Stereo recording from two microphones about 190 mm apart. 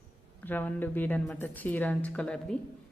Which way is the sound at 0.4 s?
10° left (ahead or behind).